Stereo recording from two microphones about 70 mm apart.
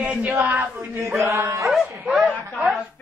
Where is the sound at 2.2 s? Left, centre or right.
Right.